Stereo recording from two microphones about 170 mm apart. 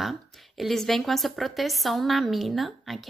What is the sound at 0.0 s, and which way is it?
A woman's voice, centre (ahead or behind).